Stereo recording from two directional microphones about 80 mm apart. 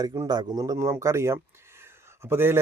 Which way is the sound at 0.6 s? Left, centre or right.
Right.